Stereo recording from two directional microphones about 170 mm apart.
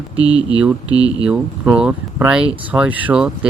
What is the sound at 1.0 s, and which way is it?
Speech, 25° left (ahead or behind).